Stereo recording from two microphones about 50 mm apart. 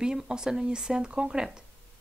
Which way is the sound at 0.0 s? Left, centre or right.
Centre.